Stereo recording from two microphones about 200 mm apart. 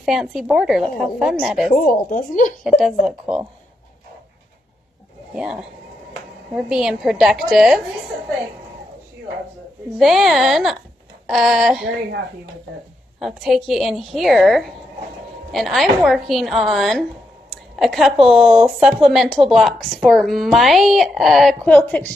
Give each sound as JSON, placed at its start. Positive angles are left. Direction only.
{"t": 0.0, "sound": "speech", "side_deg": 0}
{"t": 1.7, "sound": "speech", "side_deg": 40}
{"t": 2.6, "sound": "speech", "side_deg": 0}
{"t": 5.3, "sound": "speech", "side_deg": -5}
{"t": 9.9, "sound": "speech", "side_deg": 0}
{"t": 13.2, "sound": "speech", "side_deg": 0}